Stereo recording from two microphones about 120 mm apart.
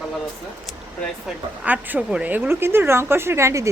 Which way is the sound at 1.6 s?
15° right (ahead or behind).